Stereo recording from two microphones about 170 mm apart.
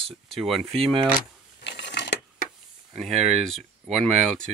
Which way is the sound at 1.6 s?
90° left.